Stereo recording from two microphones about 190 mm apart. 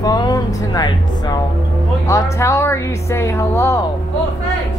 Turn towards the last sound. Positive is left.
turn(degrees=15)  # may be behind; listen again after turning